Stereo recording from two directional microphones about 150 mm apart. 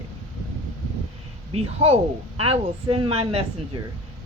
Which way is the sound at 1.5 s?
40° right (ahead or behind).